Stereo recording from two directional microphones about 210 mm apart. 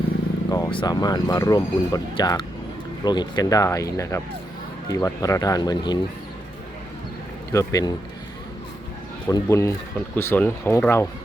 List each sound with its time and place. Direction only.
0.5 s speech: 20° left (ahead or behind)
7.5 s speech: 15° left (ahead or behind)
9.2 s speech: 15° left (ahead or behind)